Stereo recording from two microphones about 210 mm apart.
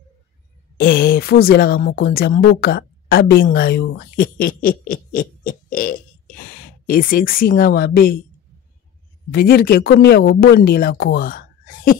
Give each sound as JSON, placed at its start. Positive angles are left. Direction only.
{"t": 0.7, "sound": "speech", "side_deg": 45}
{"t": 9.3, "sound": "speech", "side_deg": 45}